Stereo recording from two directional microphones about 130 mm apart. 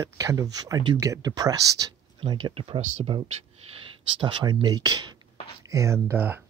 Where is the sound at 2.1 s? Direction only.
40° right (ahead or behind).